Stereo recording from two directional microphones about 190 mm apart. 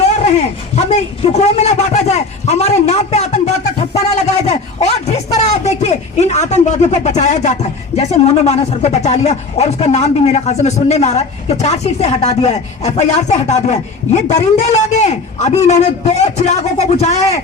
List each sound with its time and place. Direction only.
0.0 s a man's voice: 35° left (ahead or behind)